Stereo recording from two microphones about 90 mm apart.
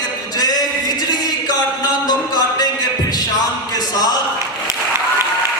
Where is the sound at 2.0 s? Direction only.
45° left (ahead or behind).